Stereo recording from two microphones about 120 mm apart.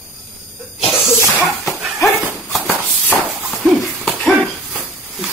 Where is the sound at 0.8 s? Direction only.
5° right (ahead or behind).